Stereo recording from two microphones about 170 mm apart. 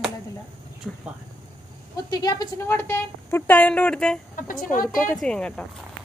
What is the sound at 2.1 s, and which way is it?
A woman's voice, 25° left (ahead or behind).